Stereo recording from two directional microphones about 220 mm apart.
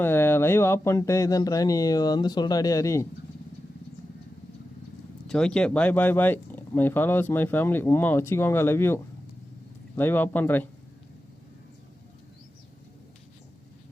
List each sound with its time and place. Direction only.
0.0 s speech: 10° left (ahead or behind)
5.3 s speech: 5° left (ahead or behind)